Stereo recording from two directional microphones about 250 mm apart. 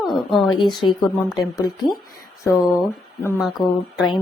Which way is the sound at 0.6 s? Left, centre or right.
Centre.